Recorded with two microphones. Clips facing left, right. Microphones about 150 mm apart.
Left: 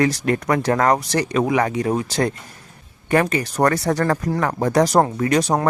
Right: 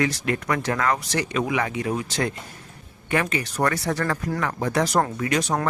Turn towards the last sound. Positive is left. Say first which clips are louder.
# left 5 dB
turn(degrees=35)  # may be behind; listen again after turning